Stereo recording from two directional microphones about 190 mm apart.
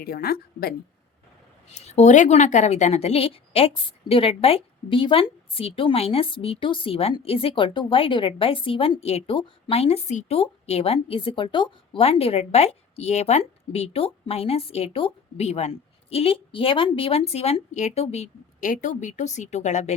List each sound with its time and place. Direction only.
0.0 s a woman's voice: 55° left (ahead or behind)
1.7 s a woman's voice: 35° left (ahead or behind)